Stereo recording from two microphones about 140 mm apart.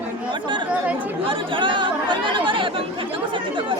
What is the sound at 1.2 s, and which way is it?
Speech, 35° right (ahead or behind).